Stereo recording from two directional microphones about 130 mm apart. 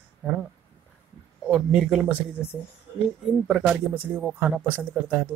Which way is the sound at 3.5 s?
10° right (ahead or behind).